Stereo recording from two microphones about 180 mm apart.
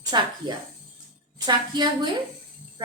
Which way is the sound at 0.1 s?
25° right (ahead or behind).